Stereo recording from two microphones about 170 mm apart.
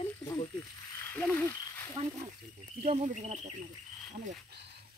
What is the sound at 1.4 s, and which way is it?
Speech, 15° left (ahead or behind).